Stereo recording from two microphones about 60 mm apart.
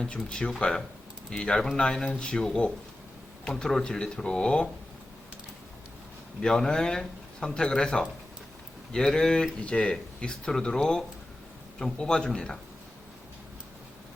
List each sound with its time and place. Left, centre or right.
0.0 s speech: centre
6.4 s speech: centre